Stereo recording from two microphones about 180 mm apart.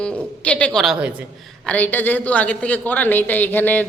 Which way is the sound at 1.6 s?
10° left (ahead or behind).